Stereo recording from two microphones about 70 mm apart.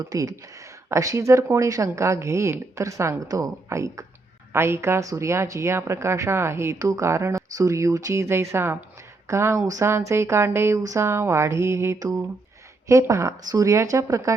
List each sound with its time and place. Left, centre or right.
0.0 s speech: right
3.2 s a sound: right
3.7 s speech: right
10.8 s speech: right
11.9 s a sound: right
12.9 s speech: right